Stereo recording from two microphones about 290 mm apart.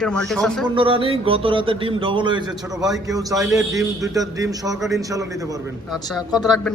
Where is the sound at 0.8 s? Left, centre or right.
Centre.